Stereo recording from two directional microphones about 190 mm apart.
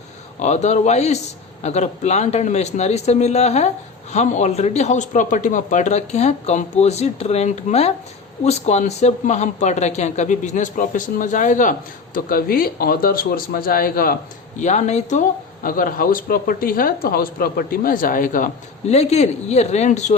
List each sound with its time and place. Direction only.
0.4 s a man's voice: 35° left (ahead or behind)
14.6 s speech: 40° left (ahead or behind)